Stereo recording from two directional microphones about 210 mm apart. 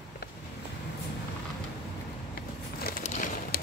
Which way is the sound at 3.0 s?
35° left (ahead or behind).